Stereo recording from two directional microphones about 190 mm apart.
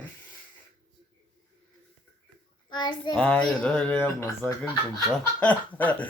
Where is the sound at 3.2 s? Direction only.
5° left (ahead or behind).